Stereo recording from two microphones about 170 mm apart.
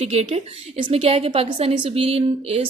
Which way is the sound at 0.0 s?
40° right (ahead or behind).